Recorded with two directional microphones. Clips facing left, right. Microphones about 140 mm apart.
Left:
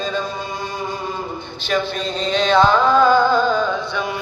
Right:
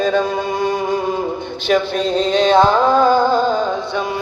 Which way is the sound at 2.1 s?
50° right (ahead or behind).